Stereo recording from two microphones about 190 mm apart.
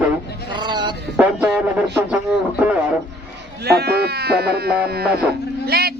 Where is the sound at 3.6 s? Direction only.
55° right (ahead or behind).